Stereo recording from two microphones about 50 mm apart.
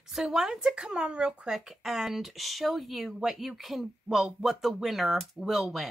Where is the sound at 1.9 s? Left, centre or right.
Centre.